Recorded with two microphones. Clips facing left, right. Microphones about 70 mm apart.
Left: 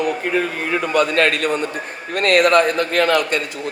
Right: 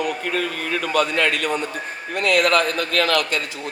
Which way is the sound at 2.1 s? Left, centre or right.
Left.